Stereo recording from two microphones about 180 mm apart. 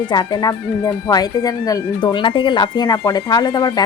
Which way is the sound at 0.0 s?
25° left (ahead or behind).